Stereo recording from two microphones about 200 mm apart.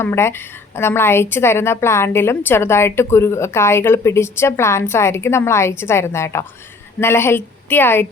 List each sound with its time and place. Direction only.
0.0 s a woman's voice: 10° left (ahead or behind)